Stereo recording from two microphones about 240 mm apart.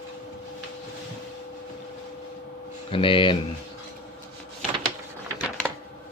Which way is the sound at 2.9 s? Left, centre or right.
Left.